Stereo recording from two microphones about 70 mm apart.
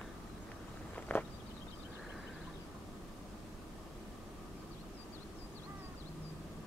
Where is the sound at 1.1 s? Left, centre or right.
Left.